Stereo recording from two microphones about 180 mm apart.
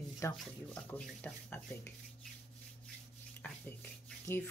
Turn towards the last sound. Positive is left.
turn(degrees=10)  # may be behind; listen again after turning